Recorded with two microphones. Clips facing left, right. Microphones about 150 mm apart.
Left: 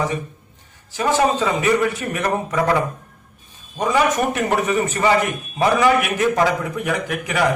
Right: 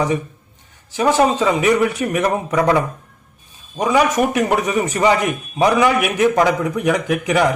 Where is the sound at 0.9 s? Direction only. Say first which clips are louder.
Right 3 dB; 15° right (ahead or behind).